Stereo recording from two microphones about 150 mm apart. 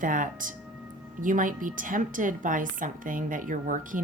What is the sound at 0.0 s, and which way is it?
A woman's voice, 65° right (ahead or behind).